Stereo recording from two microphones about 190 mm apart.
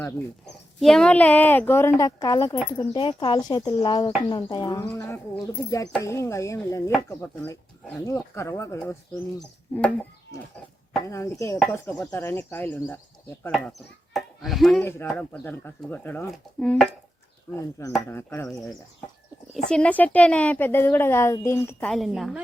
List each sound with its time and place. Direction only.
0.8 s speech: 5° left (ahead or behind)
17.5 s speech: 15° left (ahead or behind)
19.7 s speech: 5° left (ahead or behind)